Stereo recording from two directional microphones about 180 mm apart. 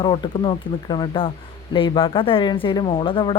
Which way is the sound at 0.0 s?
25° left (ahead or behind).